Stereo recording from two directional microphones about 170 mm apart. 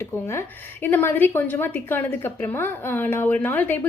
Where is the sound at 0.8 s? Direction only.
10° left (ahead or behind).